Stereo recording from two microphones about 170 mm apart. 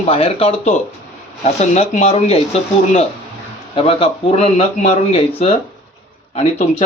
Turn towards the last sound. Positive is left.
turn(degrees=40)  # may be behind; listen again after turning